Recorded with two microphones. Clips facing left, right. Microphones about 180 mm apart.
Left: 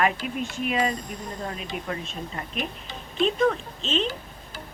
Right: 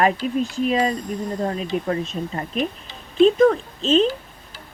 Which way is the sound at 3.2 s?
40° right (ahead or behind).